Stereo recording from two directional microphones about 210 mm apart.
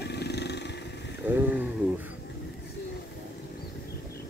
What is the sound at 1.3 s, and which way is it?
Speech, 10° right (ahead or behind).